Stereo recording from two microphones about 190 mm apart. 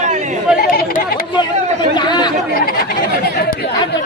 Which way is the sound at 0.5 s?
50° left (ahead or behind).